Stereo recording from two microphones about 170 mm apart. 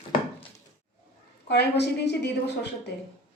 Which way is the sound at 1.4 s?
80° left.